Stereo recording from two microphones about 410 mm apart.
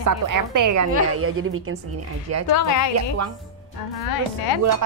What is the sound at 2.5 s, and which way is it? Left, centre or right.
Speech, left.